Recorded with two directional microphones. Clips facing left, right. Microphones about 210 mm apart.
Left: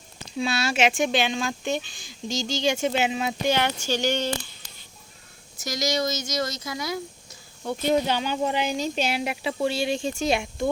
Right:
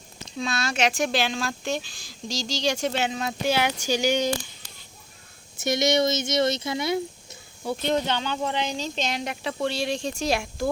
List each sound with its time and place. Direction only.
0.3 s speech: 10° left (ahead or behind)
3.5 s speech: 10° right (ahead or behind)
5.5 s speech: 25° right (ahead or behind)
7.8 s speech: 10° left (ahead or behind)